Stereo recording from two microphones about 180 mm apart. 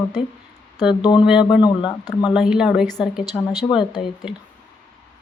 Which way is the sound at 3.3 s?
20° left (ahead or behind).